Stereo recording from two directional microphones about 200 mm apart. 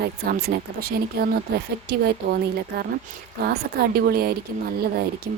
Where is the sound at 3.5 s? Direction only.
50° right (ahead or behind).